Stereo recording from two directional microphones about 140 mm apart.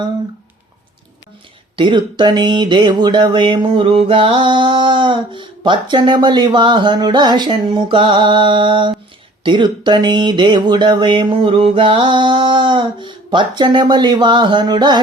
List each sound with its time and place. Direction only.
1.7 s speech: 35° right (ahead or behind)